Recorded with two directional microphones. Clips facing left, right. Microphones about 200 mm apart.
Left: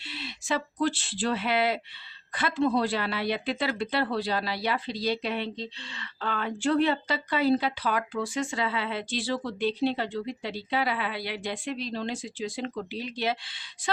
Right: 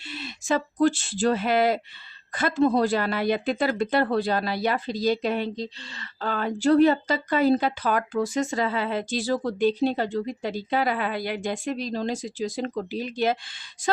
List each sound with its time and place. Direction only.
0.0 s a woman's voice: 45° right (ahead or behind)